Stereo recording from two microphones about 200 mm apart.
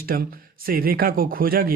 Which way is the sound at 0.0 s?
45° right (ahead or behind).